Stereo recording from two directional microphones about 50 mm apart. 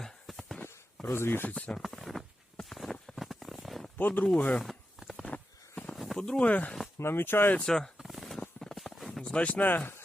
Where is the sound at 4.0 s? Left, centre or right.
Left.